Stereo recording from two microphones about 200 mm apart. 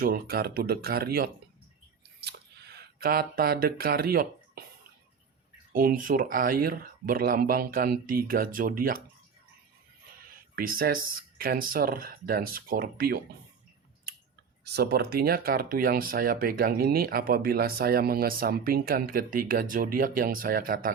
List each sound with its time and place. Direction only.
0.0 s speech: 50° right (ahead or behind)
5.7 s speech: 45° right (ahead or behind)
10.2 s speech: 45° right (ahead or behind)
14.6 s speech: 55° right (ahead or behind)